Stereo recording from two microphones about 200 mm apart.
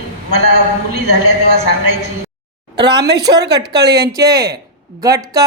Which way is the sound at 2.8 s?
20° right (ahead or behind).